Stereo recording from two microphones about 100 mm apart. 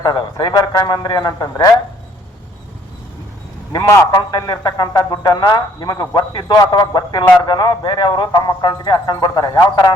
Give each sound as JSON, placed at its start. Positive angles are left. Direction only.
{"t": 0.0, "sound": "a man's voice", "side_deg": 45}
{"t": 3.7, "sound": "a man's voice", "side_deg": 40}